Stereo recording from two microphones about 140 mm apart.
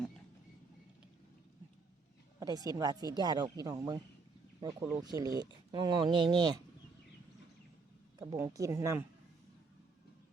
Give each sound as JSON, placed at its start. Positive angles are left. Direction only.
{"t": 2.4, "sound": "speech", "side_deg": -25}
{"t": 8.3, "sound": "speech", "side_deg": -25}